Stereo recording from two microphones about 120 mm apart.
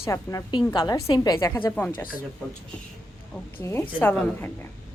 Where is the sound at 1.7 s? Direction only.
15° left (ahead or behind).